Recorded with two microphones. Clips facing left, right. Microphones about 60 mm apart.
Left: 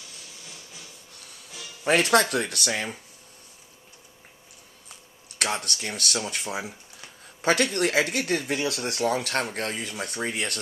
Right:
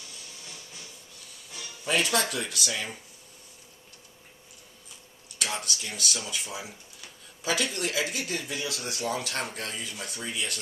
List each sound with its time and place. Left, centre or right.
1.9 s speech: left
5.4 s speech: left